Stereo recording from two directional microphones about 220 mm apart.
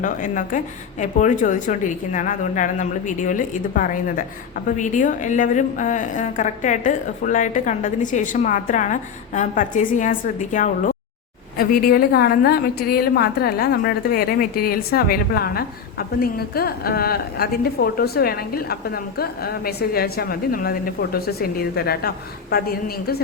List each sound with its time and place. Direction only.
0.0 s a woman's voice: 35° left (ahead or behind)